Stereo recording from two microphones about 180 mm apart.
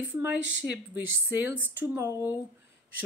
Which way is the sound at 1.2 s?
10° right (ahead or behind).